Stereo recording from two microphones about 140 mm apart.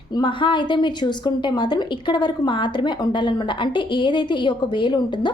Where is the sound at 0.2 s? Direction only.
35° left (ahead or behind).